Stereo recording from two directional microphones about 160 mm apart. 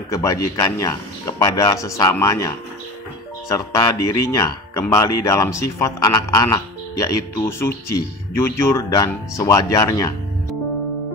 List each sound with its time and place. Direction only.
0.1 s speech: 20° left (ahead or behind)